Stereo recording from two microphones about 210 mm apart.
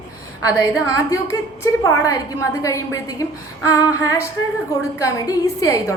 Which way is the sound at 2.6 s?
15° left (ahead or behind).